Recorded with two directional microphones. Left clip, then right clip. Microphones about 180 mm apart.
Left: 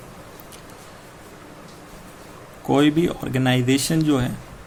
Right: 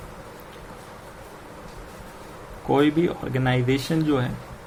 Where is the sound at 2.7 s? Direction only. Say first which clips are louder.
Left 2 dB; 50° left (ahead or behind).